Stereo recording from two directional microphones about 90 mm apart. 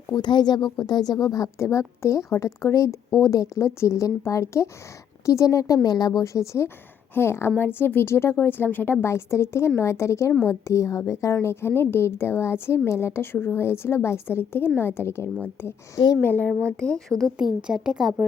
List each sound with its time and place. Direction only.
0.1 s a woman's voice: 55° left (ahead or behind); by 16.5 s 20° left (ahead or behind)
16.8 s speech: 5° left (ahead or behind)
17.3 s a woman's voice: 10° right (ahead or behind)